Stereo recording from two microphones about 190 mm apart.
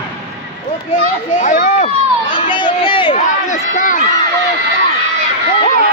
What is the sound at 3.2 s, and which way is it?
Speech, 40° left (ahead or behind).